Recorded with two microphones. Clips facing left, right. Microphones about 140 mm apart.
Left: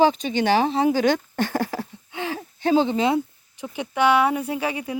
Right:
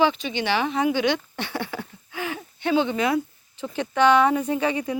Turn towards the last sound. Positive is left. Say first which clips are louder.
# right 2 dB
turn(degrees=10)  # may be behind; listen again after turning